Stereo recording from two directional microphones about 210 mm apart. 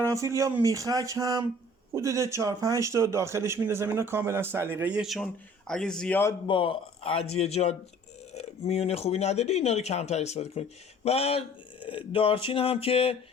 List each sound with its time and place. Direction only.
0.0 s speech: 15° right (ahead or behind); by 6.3 s 10° left (ahead or behind)
6.5 s speech: 25° left (ahead or behind)